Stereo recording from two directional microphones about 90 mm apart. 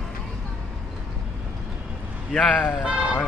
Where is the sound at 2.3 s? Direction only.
5° left (ahead or behind).